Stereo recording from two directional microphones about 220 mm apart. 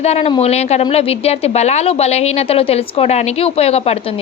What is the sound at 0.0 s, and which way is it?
A woman's voice, 30° left (ahead or behind).